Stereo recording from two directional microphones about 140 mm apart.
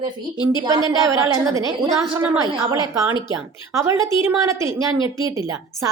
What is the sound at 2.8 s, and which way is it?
A woman's voice, 25° right (ahead or behind).